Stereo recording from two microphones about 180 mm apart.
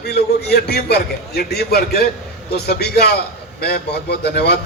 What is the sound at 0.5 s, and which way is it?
A man's voice, 60° left (ahead or behind).